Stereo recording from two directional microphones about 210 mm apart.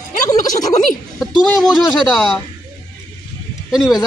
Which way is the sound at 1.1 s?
Centre (ahead or behind).